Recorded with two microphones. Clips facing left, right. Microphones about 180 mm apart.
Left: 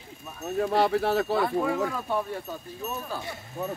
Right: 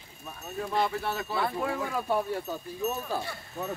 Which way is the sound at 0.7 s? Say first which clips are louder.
Left 5 dB; 75° left (ahead or behind).